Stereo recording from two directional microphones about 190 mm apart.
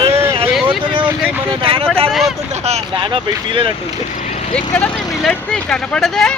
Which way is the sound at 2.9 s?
25° right (ahead or behind).